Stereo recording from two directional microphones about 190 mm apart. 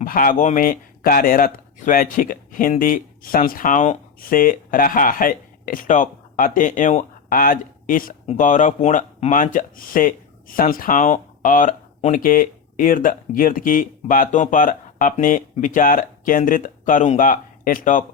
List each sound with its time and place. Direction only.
0.0 s speech: 45° left (ahead or behind)